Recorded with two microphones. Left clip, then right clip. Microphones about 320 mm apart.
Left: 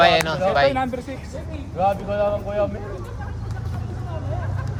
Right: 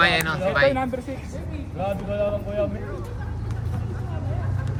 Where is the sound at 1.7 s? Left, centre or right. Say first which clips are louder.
Left 5 dB; left.